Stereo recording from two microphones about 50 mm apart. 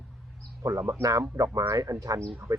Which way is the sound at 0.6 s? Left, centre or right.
Right.